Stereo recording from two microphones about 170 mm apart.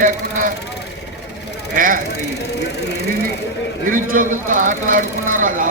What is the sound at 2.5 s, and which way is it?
Speech, 80° left.